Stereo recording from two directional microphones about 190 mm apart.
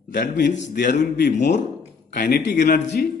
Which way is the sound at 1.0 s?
60° left (ahead or behind).